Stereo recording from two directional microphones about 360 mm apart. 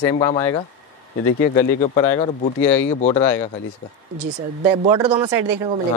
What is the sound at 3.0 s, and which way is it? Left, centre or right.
Speech, centre.